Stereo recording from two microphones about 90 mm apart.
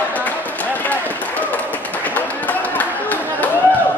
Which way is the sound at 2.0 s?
15° left (ahead or behind).